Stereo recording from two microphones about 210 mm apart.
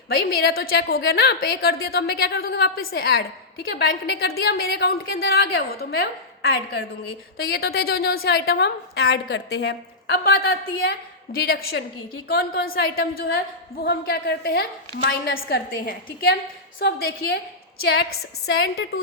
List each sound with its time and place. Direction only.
0.1 s a woman's voice: 45° left (ahead or behind)
10.8 s a woman's voice: 45° left (ahead or behind)